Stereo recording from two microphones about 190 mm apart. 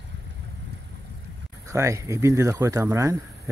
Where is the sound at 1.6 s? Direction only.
15° right (ahead or behind).